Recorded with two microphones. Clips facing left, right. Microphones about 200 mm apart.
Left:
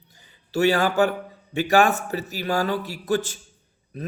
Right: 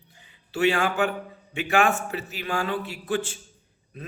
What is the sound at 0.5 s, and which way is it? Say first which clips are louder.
A man's voice: left 3 dB; 40° left (ahead or behind).